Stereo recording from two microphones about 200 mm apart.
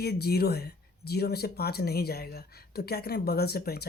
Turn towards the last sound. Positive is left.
turn(degrees=50)  # may be behind; listen again after turning